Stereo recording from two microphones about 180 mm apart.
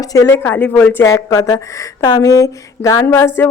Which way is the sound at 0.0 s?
20° left (ahead or behind).